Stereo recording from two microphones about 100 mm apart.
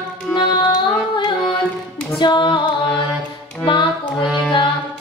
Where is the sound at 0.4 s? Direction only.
50° left (ahead or behind).